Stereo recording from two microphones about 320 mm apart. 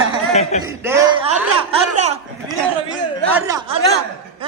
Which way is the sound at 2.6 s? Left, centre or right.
Centre.